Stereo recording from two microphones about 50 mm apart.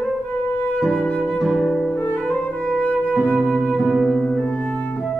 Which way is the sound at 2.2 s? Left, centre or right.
Left.